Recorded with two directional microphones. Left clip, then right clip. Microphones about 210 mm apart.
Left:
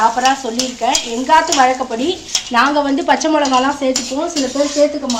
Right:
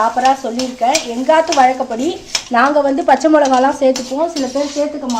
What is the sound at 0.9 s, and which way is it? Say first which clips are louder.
Speech: even; 55° right (ahead or behind).